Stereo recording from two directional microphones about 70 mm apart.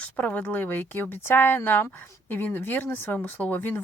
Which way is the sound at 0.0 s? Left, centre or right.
Left.